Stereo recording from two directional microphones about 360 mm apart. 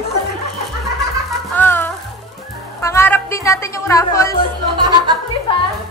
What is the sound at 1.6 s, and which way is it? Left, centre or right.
Music, centre.